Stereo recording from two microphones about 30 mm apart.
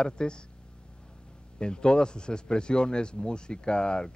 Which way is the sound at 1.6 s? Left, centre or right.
Left.